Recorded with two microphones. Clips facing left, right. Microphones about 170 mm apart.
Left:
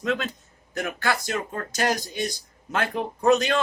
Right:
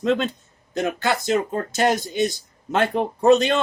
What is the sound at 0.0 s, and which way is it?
Speech, 25° right (ahead or behind).